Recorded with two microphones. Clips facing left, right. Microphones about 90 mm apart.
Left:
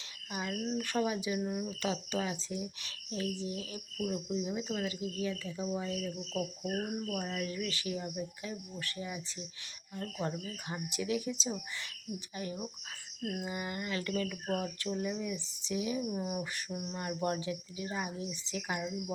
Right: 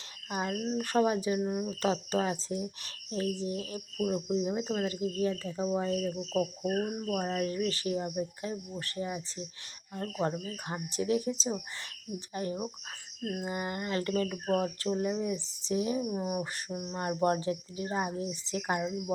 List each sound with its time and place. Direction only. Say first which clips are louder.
0.3 s cricket: right 5 dB; 40° right (ahead or behind)
0.5 s speech: right 3 dB; 15° right (ahead or behind)
0.8 s cricket: right 7 dB; 35° right (ahead or behind)
1.4 s speech: right 4 dB; 20° right (ahead or behind)
1.7 s cricket: right 5 dB; 35° right (ahead or behind)
6.7 s cricket: right 4 dB; 30° right (ahead or behind)
16.0 s speech: right 3 dB; 20° right (ahead or behind)
16.9 s cricket: right 6 dB; 35° right (ahead or behind)